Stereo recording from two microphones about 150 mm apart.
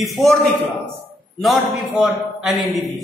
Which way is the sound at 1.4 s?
Centre (ahead or behind).